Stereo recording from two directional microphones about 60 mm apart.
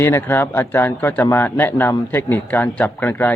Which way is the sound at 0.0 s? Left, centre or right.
Left.